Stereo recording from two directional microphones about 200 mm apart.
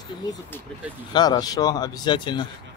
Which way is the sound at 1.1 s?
20° left (ahead or behind).